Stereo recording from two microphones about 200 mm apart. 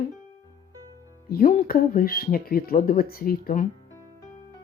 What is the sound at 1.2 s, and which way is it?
Speech, 45° left (ahead or behind).